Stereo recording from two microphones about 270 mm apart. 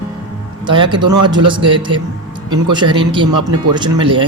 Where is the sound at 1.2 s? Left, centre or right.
Centre.